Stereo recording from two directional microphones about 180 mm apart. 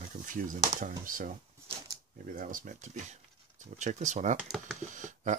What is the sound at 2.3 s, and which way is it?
Speech, 50° right (ahead or behind).